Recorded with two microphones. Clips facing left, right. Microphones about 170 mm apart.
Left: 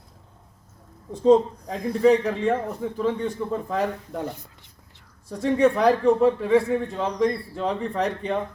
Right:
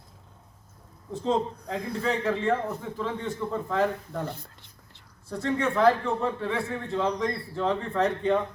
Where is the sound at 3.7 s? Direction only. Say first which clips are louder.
Even; 15° left (ahead or behind).